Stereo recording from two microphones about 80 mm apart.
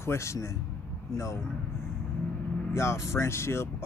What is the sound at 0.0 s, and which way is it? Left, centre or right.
Speech, left.